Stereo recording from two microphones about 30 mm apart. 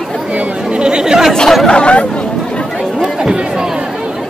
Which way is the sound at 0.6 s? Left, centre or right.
Right.